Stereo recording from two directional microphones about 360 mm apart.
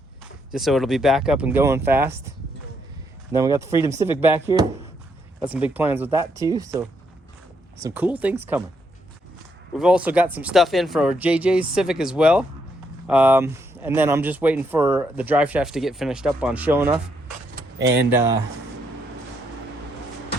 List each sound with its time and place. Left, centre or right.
0.5 s speech: centre
3.3 s speech: centre
9.7 s speech: centre
17.7 s speech: right